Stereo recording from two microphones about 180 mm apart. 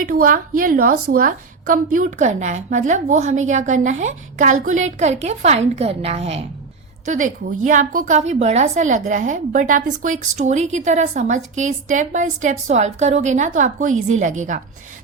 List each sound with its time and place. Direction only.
0.0 s a woman's voice: 50° right (ahead or behind)